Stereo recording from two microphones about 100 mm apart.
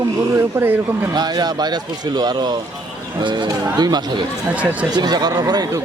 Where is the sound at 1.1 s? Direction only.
45° right (ahead or behind).